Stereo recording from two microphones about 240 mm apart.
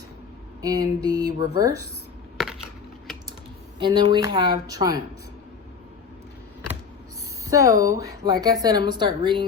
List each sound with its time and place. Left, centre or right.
0.6 s speech: centre
2.4 s a sound: centre
3.8 s speech: centre
7.4 s speech: centre